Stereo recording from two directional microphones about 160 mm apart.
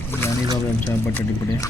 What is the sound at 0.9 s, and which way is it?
Speech, 15° left (ahead or behind).